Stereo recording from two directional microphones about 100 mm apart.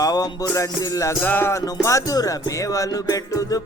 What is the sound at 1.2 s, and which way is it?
Speech, 20° left (ahead or behind).